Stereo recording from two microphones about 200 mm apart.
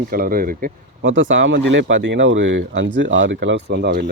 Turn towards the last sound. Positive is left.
turn(degrees=-55)  # may be behind; listen again after turning